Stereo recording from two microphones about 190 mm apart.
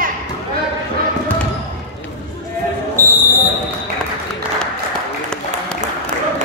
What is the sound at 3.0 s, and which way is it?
Basketball bounce, 10° right (ahead or behind).